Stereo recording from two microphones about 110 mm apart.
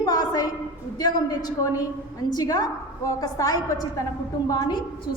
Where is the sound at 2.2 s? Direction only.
35° left (ahead or behind).